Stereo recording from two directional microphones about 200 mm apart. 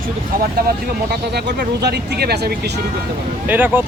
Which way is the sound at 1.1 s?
55° right (ahead or behind).